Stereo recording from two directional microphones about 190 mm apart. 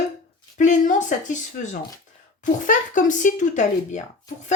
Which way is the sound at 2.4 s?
40° left (ahead or behind).